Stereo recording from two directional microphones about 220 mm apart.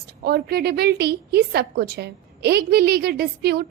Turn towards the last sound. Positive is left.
turn(degrees=-45)  # may be behind; listen again after turning